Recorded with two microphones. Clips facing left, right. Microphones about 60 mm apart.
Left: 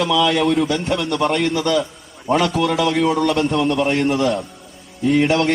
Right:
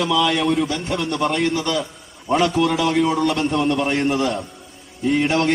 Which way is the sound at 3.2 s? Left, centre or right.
Left.